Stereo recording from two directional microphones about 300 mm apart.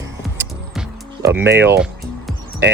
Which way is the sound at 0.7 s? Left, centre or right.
Centre.